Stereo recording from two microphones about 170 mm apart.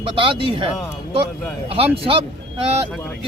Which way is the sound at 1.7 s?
35° right (ahead or behind).